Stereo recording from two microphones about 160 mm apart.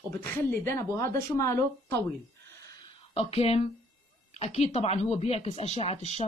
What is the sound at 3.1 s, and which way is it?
Speech, 40° left (ahead or behind).